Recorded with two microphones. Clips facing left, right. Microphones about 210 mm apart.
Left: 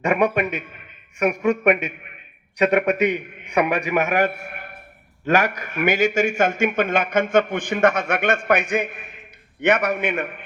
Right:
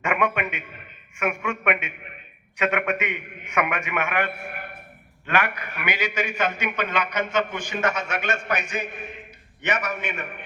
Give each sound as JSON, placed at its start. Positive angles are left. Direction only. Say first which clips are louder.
{"t": 0.0, "sound": "a man's voice", "louder": "left 5 dB", "side_deg": 35}